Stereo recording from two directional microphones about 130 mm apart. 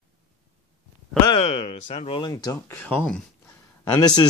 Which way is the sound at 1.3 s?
50° left (ahead or behind).